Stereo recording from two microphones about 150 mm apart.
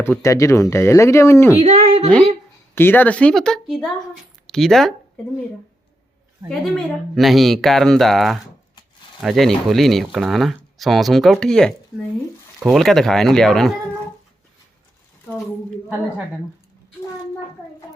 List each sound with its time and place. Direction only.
0.0 s speech: 20° left (ahead or behind)
1.6 s a sound: 50° right (ahead or behind)
2.7 s speech: 15° left (ahead or behind)
6.5 s speech: centre (ahead or behind)